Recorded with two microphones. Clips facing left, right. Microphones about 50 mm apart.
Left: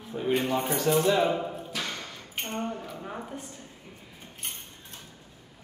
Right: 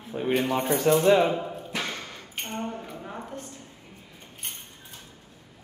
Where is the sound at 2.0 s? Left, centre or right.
Centre.